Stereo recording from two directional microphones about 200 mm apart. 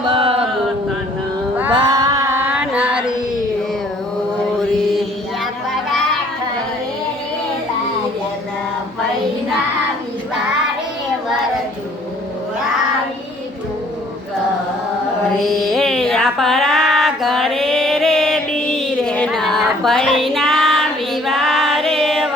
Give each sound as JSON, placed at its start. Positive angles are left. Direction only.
{"t": 0.0, "sound": "chant", "side_deg": -25}
{"t": 1.7, "sound": "female singing", "side_deg": -20}
{"t": 15.4, "sound": "a sound", "side_deg": 0}